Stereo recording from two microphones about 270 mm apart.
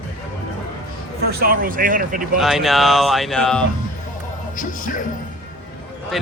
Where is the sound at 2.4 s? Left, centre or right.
Centre.